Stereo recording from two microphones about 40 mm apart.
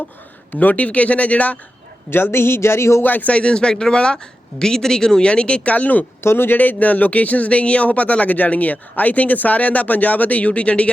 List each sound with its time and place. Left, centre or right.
0.5 s speech: left
2.0 s speech: left
3.0 s a man's voice: left
3.2 s speech: left
6.2 s speech: left
6.6 s speech: left